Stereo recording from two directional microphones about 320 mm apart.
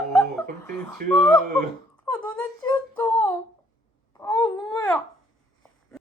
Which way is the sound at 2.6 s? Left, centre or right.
Centre.